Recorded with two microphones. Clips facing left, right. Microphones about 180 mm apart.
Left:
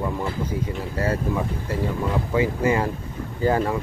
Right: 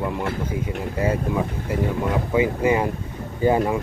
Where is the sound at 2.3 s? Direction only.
20° right (ahead or behind).